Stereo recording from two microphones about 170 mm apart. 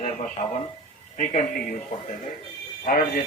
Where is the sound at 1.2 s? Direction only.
45° left (ahead or behind).